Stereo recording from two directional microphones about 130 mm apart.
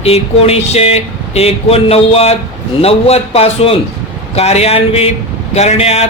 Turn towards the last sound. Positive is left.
turn(degrees=55)  # may be behind; listen again after turning